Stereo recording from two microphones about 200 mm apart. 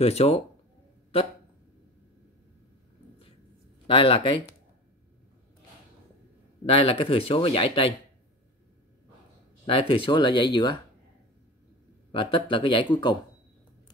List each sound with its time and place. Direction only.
0.0 s speech: 30° left (ahead or behind)
3.8 s speech: 25° left (ahead or behind)
6.6 s speech: 30° left (ahead or behind)
9.7 s speech: 25° left (ahead or behind)
12.1 s speech: 25° left (ahead or behind)